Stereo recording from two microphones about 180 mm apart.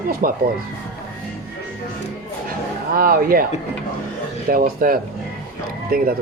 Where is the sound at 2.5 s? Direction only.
55° right (ahead or behind).